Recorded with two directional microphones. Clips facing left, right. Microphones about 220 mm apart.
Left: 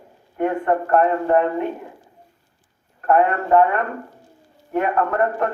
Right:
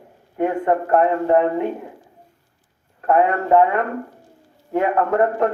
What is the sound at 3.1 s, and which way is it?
Speech, 20° right (ahead or behind).